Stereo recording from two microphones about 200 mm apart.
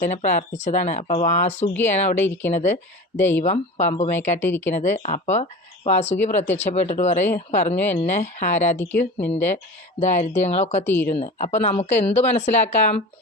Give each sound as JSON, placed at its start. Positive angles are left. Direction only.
{"t": 0.0, "sound": "speech", "side_deg": 35}
{"t": 2.1, "sound": "speech", "side_deg": 10}
{"t": 2.5, "sound": "speech", "side_deg": 35}
{"t": 3.2, "sound": "speech", "side_deg": 10}
{"t": 3.4, "sound": "speech", "side_deg": 35}
{"t": 4.4, "sound": "speech", "side_deg": 10}
{"t": 4.7, "sound": "speech", "side_deg": 35}
{"t": 8.8, "sound": "speech", "side_deg": 10}
{"t": 10.0, "sound": "speech", "side_deg": 35}
{"t": 10.8, "sound": "speech", "side_deg": 10}
{"t": 11.1, "sound": "speech", "side_deg": 30}